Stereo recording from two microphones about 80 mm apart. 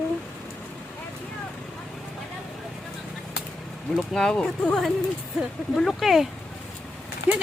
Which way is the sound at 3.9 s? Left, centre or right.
Centre.